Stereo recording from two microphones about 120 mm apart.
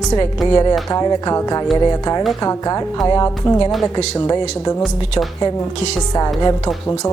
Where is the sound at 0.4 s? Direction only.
40° left (ahead or behind).